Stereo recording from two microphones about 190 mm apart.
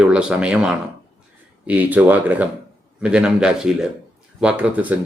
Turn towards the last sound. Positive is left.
turn(degrees=-10)  # may be behind; listen again after turning